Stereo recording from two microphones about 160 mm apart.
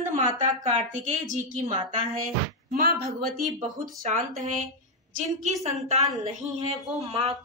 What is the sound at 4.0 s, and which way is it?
Speech, 55° right (ahead or behind).